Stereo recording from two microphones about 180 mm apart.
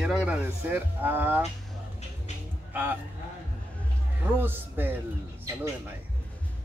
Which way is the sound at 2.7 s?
10° right (ahead or behind).